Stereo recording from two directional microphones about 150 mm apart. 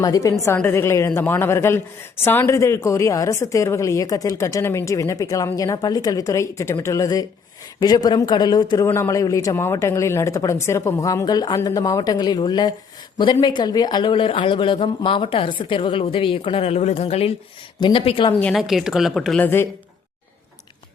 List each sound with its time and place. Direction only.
0.0 s a woman's voice: 25° left (ahead or behind)
18.5 s a woman's voice: centre (ahead or behind)